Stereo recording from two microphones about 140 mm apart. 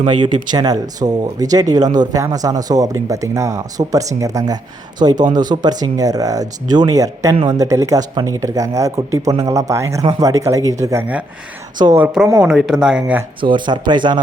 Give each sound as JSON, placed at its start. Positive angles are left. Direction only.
{"t": 0.2, "sound": "speech", "side_deg": -30}
{"t": 11.9, "sound": "speech", "side_deg": -10}
{"t": 13.4, "sound": "speech", "side_deg": -35}